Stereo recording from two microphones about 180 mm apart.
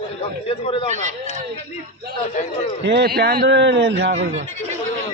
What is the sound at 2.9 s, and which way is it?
A man's voice, 65° right (ahead or behind).